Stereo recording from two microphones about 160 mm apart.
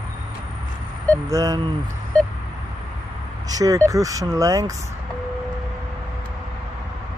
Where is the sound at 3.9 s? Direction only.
20° right (ahead or behind).